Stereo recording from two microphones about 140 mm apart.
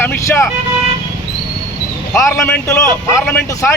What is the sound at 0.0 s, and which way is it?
Vehicle, 15° left (ahead or behind).